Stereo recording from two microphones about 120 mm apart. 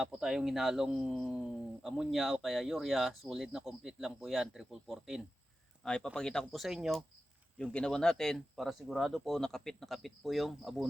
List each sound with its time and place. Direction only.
0.0 s a man's voice: 5° right (ahead or behind)
7.6 s speech: 5° left (ahead or behind)